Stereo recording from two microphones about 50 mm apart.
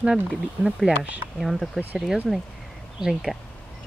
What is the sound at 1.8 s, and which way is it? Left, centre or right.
Speech, centre.